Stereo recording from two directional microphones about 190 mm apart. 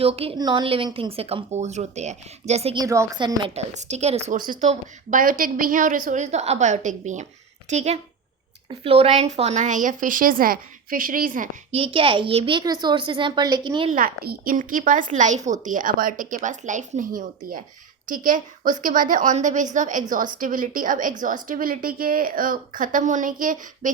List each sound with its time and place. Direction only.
0.0 s a woman's voice: 30° right (ahead or behind)
2.7 s a woman's voice: 15° right (ahead or behind); by 11.4 s 45° right (ahead or behind)
11.7 s a woman's voice: 30° right (ahead or behind)
13.9 s a woman's voice: 50° right (ahead or behind)